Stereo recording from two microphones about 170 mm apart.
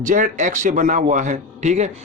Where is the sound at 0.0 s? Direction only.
50° right (ahead or behind).